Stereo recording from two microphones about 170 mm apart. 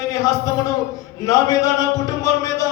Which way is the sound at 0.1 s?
20° left (ahead or behind).